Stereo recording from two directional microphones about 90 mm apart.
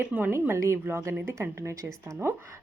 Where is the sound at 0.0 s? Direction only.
20° right (ahead or behind).